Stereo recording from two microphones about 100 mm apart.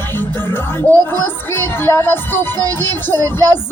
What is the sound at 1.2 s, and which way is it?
Music, 20° left (ahead or behind).